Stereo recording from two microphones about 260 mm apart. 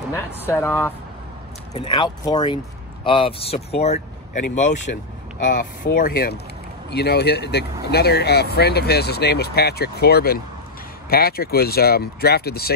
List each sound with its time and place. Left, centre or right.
0.1 s speech: centre
1.7 s speech: left